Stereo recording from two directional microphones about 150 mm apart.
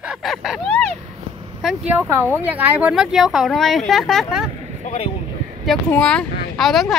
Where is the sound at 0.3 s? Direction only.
Centre (ahead or behind).